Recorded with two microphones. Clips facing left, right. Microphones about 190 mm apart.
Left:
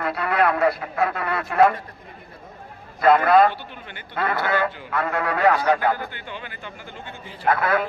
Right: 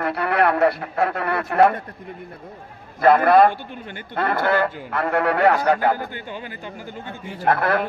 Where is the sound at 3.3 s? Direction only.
50° right (ahead or behind).